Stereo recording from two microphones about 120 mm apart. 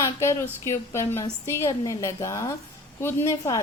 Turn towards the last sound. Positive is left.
turn(degrees=25)  # may be behind; listen again after turning